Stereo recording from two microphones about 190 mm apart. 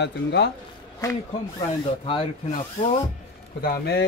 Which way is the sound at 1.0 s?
15° left (ahead or behind).